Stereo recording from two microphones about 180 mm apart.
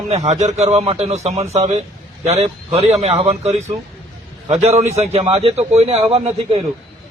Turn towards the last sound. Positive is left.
turn(degrees=-35)  # may be behind; listen again after turning